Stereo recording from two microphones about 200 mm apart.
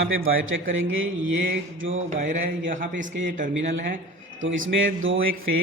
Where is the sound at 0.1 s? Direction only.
85° right.